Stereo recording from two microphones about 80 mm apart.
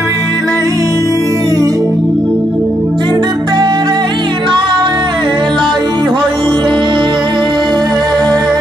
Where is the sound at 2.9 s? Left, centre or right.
Right.